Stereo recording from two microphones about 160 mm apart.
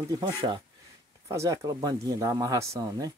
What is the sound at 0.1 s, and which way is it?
Speech, 30° right (ahead or behind).